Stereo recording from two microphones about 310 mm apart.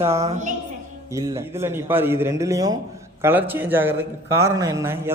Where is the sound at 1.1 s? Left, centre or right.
Centre.